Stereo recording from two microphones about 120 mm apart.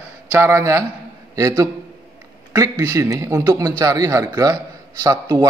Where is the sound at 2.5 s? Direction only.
25° right (ahead or behind).